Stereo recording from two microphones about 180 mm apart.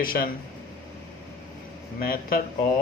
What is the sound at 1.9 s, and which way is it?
Speech, 55° left (ahead or behind).